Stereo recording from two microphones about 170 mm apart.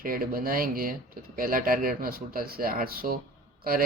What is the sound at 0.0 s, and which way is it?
Speech, 55° right (ahead or behind).